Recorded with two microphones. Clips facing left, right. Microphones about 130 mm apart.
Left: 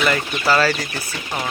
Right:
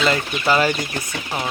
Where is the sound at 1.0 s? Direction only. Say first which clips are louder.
Right 1 dB; 5° right (ahead or behind).